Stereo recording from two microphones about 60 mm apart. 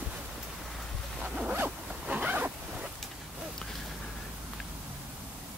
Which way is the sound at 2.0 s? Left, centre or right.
Right.